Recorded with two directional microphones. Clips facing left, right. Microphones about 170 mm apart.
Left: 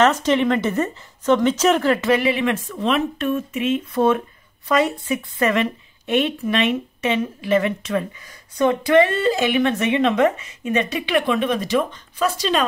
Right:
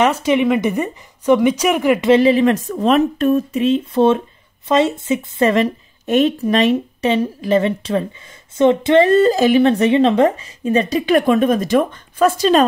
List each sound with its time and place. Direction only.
0.0 s a woman's voice: 10° right (ahead or behind)
2.1 s speech: 35° right (ahead or behind)
9.0 s speech: 40° right (ahead or behind)